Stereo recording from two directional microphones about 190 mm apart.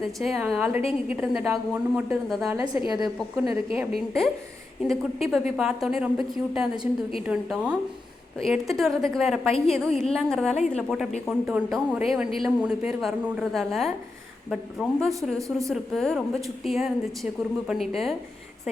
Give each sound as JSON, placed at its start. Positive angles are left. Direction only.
{"t": 0.0, "sound": "a woman's voice", "side_deg": 0}
{"t": 2.6, "sound": "a woman's voice", "side_deg": -20}
{"t": 4.8, "sound": "a woman's voice", "side_deg": 0}